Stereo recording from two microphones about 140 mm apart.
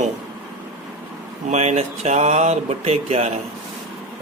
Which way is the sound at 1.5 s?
55° right (ahead or behind).